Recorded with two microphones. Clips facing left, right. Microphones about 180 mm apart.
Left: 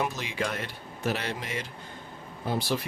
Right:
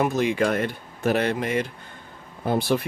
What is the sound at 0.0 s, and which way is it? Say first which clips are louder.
Speech: right 9 dB; 55° right (ahead or behind).